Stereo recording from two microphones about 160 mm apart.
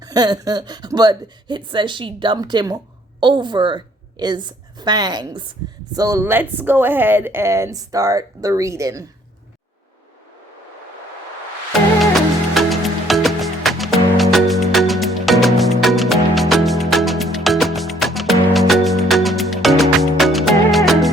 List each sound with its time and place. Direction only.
0.0 s a woman's voice: 25° right (ahead or behind)
12.1 s music: centre (ahead or behind)